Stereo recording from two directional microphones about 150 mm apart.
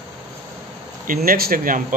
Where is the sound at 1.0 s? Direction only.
75° right (ahead or behind).